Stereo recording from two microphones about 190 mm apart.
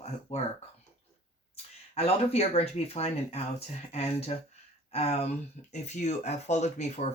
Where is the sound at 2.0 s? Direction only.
30° left (ahead or behind).